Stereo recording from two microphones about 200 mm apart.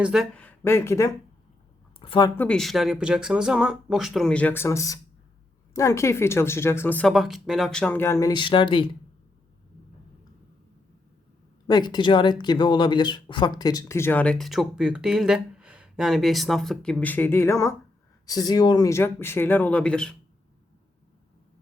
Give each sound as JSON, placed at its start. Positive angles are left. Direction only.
{"t": 0.0, "sound": "speech", "side_deg": 0}
{"t": 11.7, "sound": "speech", "side_deg": 20}